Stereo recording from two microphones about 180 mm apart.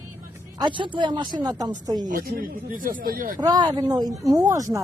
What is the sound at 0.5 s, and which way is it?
Speech, 25° right (ahead or behind).